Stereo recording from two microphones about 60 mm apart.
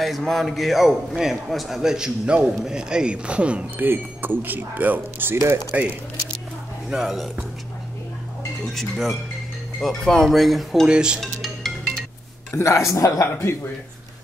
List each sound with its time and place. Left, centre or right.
0.0 s a man's voice: centre
3.7 s speech: right
5.3 s speech: right
6.9 s a man's voice: centre
8.7 s speech: centre
10.9 s a man's voice: centre
11.1 s speech: centre
12.5 s a man's voice: left